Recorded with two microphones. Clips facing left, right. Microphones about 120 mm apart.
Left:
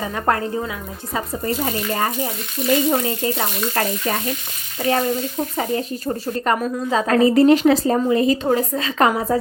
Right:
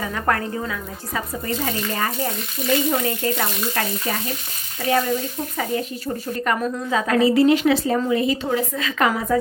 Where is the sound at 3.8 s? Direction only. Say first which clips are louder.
Left 4 dB; 35° left (ahead or behind).